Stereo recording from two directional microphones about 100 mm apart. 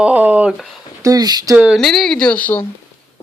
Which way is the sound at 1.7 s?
5° left (ahead or behind).